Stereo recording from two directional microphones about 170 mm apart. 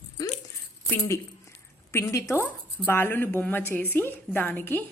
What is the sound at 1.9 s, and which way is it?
A woman's voice, 15° left (ahead or behind).